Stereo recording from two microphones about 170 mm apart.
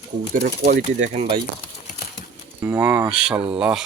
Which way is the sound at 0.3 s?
65° right (ahead or behind).